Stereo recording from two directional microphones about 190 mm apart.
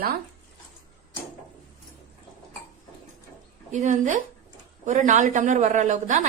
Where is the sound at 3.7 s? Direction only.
40° right (ahead or behind).